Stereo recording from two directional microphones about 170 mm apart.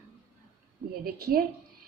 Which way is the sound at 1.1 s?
60° right (ahead or behind).